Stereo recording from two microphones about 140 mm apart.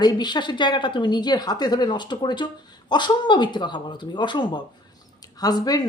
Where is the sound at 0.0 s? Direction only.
30° left (ahead or behind).